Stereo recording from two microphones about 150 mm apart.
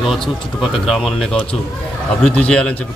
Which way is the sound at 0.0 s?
Centre (ahead or behind).